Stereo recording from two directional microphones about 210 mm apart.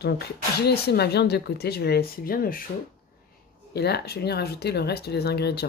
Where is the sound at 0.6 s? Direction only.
50° left (ahead or behind).